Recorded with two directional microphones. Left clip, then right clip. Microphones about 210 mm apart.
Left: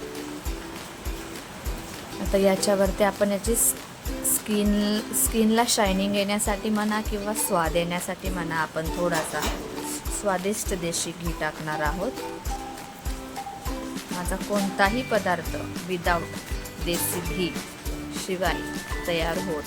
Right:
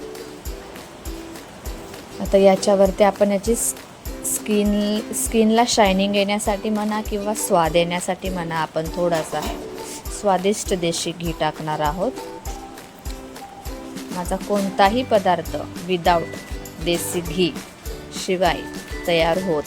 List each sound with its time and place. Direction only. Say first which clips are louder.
2.3 s speech: right 7 dB; 20° right (ahead or behind)
14.8 s speech: right 7 dB; 20° right (ahead or behind)